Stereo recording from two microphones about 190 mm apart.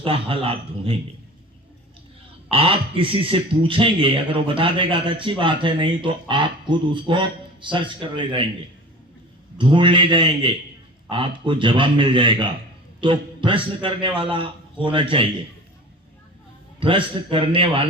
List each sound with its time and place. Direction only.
0.0 s speech: 30° right (ahead or behind)
2.5 s speech: 30° right (ahead or behind)
9.6 s speech: 25° right (ahead or behind)
16.8 s speech: 25° right (ahead or behind)